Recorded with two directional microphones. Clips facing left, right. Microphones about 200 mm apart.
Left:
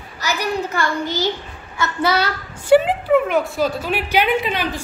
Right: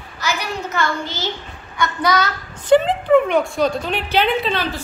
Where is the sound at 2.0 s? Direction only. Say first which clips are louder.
Even; 30° left (ahead or behind).